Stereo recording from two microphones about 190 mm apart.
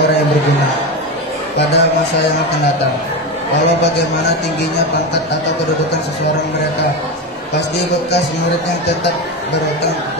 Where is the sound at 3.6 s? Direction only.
65° left (ahead or behind).